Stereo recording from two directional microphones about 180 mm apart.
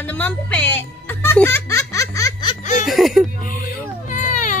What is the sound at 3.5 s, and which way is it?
Baby cry, 50° left (ahead or behind).